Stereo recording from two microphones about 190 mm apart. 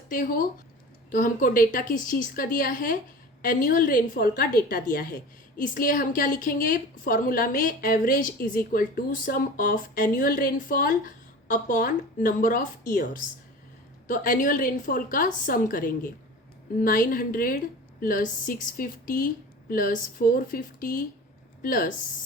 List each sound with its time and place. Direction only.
0.1 s a woman's voice: 45° left (ahead or behind)